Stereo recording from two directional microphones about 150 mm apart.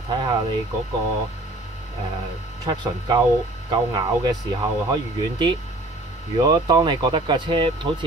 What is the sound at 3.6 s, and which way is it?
Speech, 25° right (ahead or behind).